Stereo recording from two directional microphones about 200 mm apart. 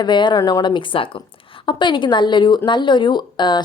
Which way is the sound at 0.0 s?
20° left (ahead or behind).